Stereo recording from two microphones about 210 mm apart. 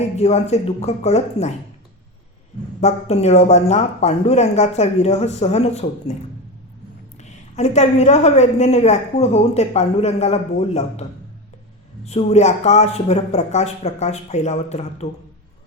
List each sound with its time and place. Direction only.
0.2 s a woman's voice: 30° left (ahead or behind)
2.8 s a woman's voice: 30° left (ahead or behind)
7.2 s a woman's voice: 35° left (ahead or behind)
12.0 s a woman's voice: 30° left (ahead or behind)